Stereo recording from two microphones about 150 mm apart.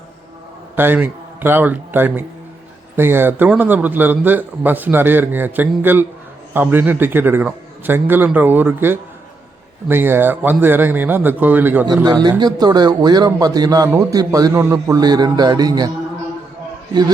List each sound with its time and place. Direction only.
0.8 s a man's voice: 10° right (ahead or behind)
12.0 s a man's voice: 30° right (ahead or behind)